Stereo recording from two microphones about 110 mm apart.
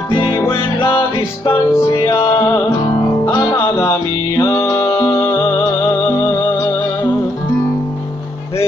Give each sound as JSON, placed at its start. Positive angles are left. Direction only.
{"t": 0.1, "sound": "music", "side_deg": 40}
{"t": 0.4, "sound": "music", "side_deg": 25}
{"t": 0.8, "sound": "music", "side_deg": 50}
{"t": 1.7, "sound": "music", "side_deg": 20}
{"t": 4.4, "sound": "music", "side_deg": 30}